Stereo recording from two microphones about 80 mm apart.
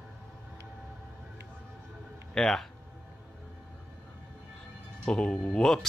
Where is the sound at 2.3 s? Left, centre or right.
Centre.